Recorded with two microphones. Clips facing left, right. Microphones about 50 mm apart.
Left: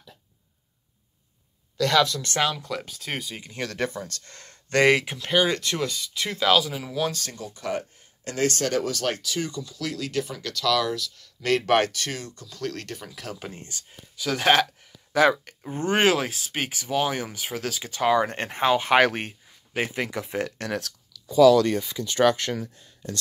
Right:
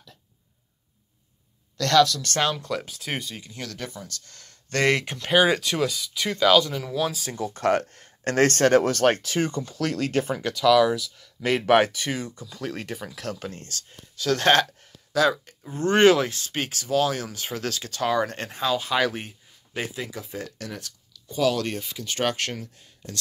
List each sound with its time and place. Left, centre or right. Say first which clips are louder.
1.8 s speech: right 2 dB; centre
2.4 s speech: right 1 dB; centre
3.3 s speech: left 6 dB; left
4.7 s speech: left 3 dB; centre
5.3 s speech: right 3 dB; centre
5.6 s speech: right 2 dB; centre
7.1 s speech: even; centre
7.5 s speech: right 8 dB; right
10.4 s speech: right 7 dB; centre
15.1 s speech: left 2 dB; left
15.8 s speech: right 4 dB; centre
17.4 s speech: even; centre; by 20.9 s left